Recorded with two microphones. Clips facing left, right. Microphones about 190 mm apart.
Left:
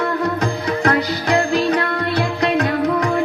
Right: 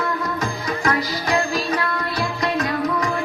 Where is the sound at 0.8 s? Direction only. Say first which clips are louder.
Left 4 dB; 65° left (ahead or behind).